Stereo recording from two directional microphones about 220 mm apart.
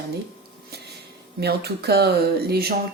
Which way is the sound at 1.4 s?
45° right (ahead or behind).